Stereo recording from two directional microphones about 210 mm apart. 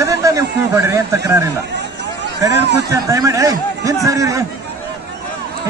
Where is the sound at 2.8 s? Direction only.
15° right (ahead or behind).